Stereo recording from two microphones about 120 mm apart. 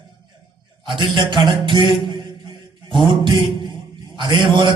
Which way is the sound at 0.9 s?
45° right (ahead or behind).